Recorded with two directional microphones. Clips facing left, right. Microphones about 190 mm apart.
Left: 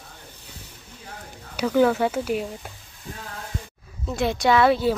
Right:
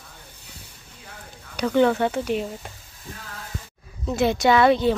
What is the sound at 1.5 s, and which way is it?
Speech, 5° left (ahead or behind).